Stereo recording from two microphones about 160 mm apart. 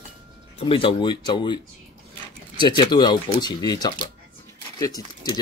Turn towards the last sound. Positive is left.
turn(degrees=25)  # may be behind; listen again after turning